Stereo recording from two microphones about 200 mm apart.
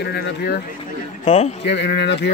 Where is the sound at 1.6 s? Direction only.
60° left (ahead or behind).